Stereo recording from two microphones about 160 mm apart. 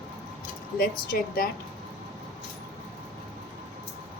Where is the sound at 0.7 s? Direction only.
65° left (ahead or behind).